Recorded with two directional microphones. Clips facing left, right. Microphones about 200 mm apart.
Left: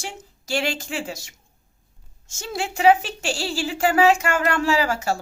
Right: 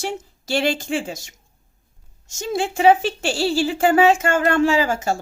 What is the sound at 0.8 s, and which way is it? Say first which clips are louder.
Speech: right 5 dB; 30° right (ahead or behind).